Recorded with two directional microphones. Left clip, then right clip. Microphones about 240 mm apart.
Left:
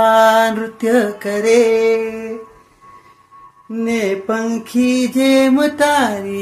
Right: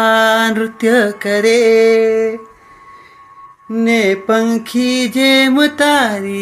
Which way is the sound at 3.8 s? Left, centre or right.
Right.